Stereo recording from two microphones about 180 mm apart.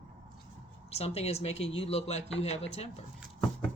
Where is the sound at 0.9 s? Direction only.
35° left (ahead or behind).